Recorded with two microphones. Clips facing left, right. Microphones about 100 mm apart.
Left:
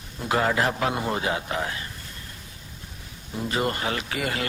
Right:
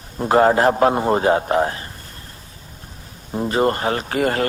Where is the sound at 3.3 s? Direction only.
40° right (ahead or behind).